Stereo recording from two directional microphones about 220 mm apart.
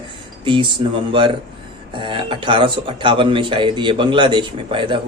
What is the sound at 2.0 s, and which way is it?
Speech, 20° right (ahead or behind).